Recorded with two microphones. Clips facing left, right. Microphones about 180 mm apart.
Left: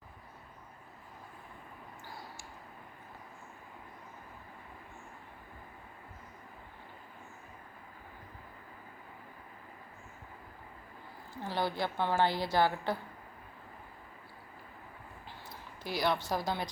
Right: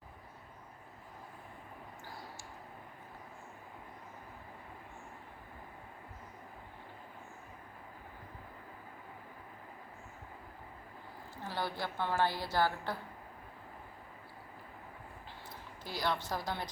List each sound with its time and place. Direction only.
11.5 s a woman's voice: 15° left (ahead or behind)
15.8 s a woman's voice: 15° left (ahead or behind)